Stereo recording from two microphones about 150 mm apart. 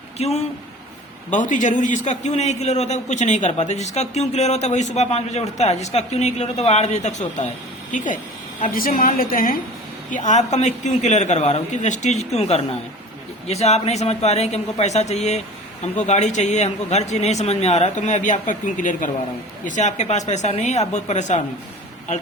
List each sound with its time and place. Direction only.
0.2 s a man's voice: 45° left (ahead or behind)
1.3 s a man's voice: 55° left (ahead or behind)
8.6 s a woman's voice: 70° left (ahead or behind)
10.1 s a man's voice: 55° left (ahead or behind)